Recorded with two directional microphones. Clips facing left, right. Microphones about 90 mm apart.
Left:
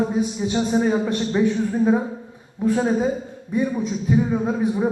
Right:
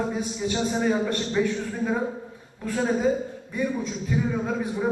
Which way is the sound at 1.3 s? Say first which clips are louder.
Left 5 dB; 25° left (ahead or behind).